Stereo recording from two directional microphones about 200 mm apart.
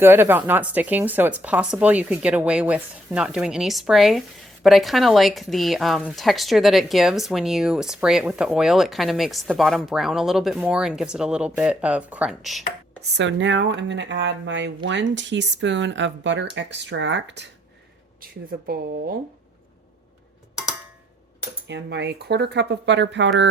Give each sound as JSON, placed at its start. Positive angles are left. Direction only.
{"t": 0.0, "sound": "a woman's voice", "side_deg": -10}
{"t": 13.0, "sound": "speech", "side_deg": -65}
{"t": 18.2, "sound": "speech", "side_deg": -50}
{"t": 21.7, "sound": "speech", "side_deg": -60}